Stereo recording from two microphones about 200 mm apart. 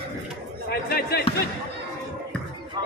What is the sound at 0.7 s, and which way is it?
Speech, 50° left (ahead or behind).